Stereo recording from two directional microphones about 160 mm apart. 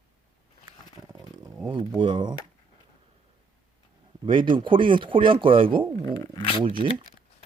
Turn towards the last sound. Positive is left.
turn(degrees=-30)  # may be behind; listen again after turning